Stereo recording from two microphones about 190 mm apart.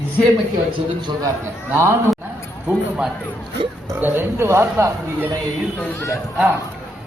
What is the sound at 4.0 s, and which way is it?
Speech, 10° right (ahead or behind).